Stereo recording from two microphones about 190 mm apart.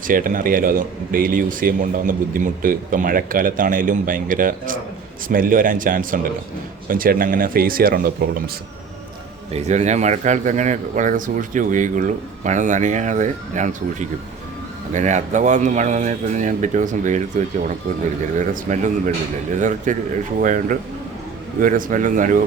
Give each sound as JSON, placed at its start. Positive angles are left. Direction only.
{"t": 0.1, "sound": "a man's voice", "side_deg": -45}
{"t": 9.5, "sound": "a man's voice", "side_deg": -35}